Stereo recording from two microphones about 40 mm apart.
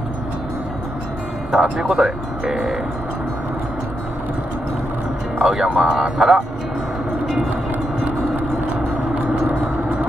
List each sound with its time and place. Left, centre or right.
1.5 s speech: centre
5.4 s speech: centre
9.1 s vehicle: right